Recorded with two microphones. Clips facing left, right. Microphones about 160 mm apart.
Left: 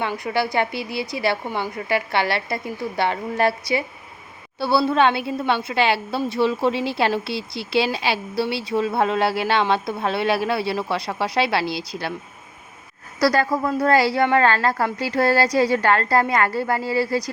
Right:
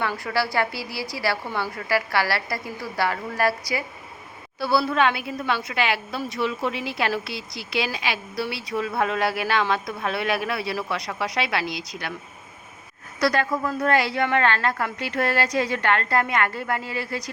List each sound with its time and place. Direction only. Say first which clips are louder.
0.0 s a woman's voice: left 2 dB; 20° left (ahead or behind)
13.1 s a woman's voice: left 3 dB; 35° left (ahead or behind)